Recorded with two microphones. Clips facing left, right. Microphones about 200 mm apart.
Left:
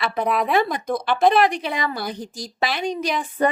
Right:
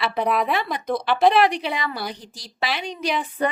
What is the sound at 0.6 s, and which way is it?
A woman's voice, 45° left (ahead or behind).